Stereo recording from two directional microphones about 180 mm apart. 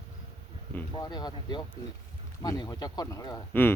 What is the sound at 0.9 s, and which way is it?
Speech, 25° left (ahead or behind).